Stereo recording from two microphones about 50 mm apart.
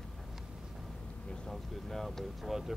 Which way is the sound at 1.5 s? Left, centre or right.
Centre.